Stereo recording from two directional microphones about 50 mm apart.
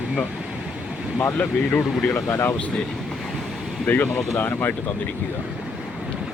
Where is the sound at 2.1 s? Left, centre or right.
Left.